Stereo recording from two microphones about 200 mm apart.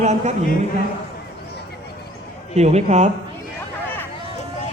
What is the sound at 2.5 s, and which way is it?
Speech, 35° right (ahead or behind).